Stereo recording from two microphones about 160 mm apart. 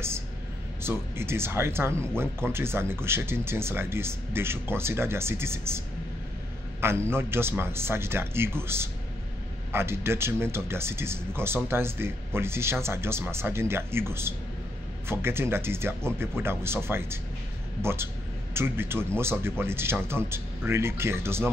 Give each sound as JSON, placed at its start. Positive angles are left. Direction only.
{"t": 0.8, "sound": "speech", "side_deg": -15}
{"t": 6.8, "sound": "speech", "side_deg": -15}